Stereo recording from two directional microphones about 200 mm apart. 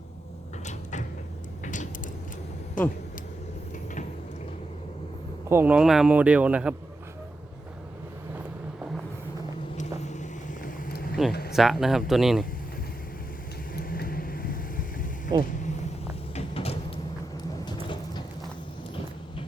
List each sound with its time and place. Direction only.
0.6 s mechanisms: 35° left (ahead or behind)
1.6 s creak: 40° left (ahead or behind)
2.8 s speech: 40° left (ahead or behind)
5.5 s speech: 10° right (ahead or behind)
9.7 s vehicle: 35° left (ahead or behind)
11.3 s a sound: 50° left (ahead or behind)
11.5 s speech: centre (ahead or behind)
13.7 s vehicle: 50° left (ahead or behind)
15.3 s speech: 20° right (ahead or behind)
16.3 s sliding door: 30° left (ahead or behind)